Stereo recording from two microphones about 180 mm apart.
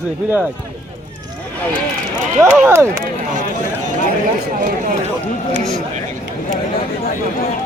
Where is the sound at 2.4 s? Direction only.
15° right (ahead or behind).